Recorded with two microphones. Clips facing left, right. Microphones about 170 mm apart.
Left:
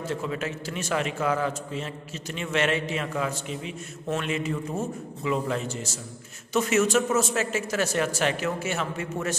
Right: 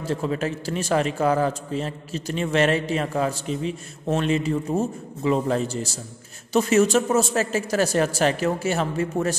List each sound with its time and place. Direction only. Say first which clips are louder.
0.0 s a man's voice: right 5 dB; 35° right (ahead or behind)